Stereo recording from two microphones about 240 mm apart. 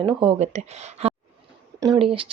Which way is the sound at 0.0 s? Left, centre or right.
Right.